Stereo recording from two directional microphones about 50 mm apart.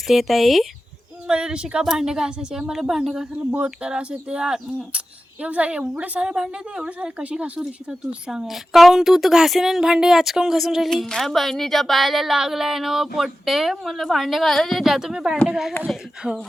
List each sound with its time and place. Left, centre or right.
0.1 s speech: centre
1.3 s a woman's voice: centre
7.6 s speech: centre
10.8 s speech: centre
16.2 s a woman's voice: centre